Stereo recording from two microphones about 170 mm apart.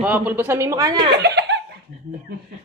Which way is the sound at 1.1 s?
85° right.